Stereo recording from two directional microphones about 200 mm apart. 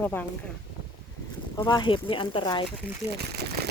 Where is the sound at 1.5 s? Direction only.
20° left (ahead or behind).